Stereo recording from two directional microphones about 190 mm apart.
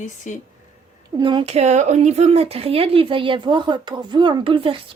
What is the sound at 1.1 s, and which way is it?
Speech, 25° right (ahead or behind).